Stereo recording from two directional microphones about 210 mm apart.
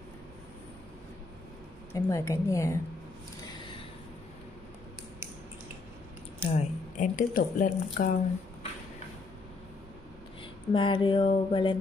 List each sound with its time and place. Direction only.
1.9 s a woman's voice: 15° left (ahead or behind)
6.5 s speech: 35° left (ahead or behind)
10.7 s a sound: 25° left (ahead or behind)